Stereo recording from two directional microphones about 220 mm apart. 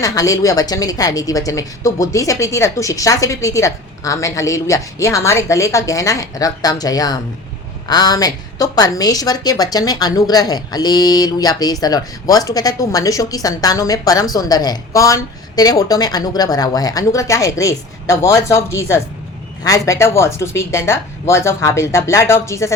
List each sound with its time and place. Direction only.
0.0 s a woman's voice: 15° left (ahead or behind)